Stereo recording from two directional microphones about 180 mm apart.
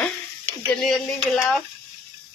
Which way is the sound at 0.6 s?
5° left (ahead or behind).